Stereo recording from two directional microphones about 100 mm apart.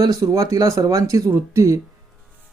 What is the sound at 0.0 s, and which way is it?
Speech, 35° right (ahead or behind).